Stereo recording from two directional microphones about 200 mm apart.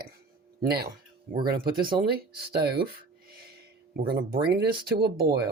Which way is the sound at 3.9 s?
50° right (ahead or behind).